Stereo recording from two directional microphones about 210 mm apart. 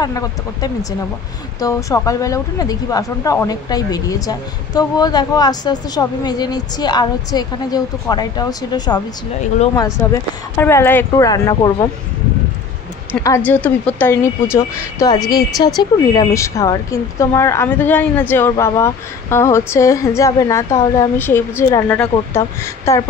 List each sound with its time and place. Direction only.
0.0 s speech: 20° left (ahead or behind)
13.1 s speech: 10° left (ahead or behind)